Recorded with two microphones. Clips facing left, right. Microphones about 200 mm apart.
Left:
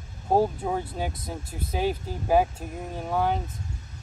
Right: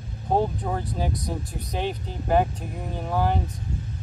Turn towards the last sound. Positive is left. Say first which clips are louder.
# right 1 dB
turn(degrees=0)  # may be behind; listen again after turning